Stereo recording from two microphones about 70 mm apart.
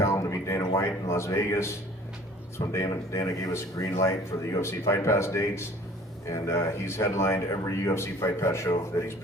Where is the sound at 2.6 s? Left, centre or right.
Left.